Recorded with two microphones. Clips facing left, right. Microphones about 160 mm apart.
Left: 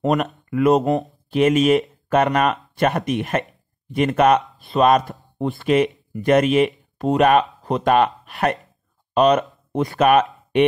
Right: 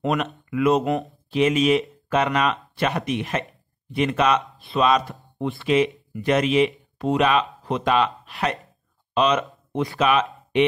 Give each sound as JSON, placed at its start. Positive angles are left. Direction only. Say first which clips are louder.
{"t": 0.0, "sound": "speech", "louder": "left 4 dB", "side_deg": 45}